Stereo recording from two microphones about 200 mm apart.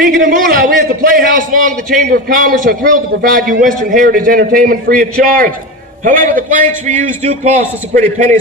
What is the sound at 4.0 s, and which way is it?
A man's voice, 45° right (ahead or behind).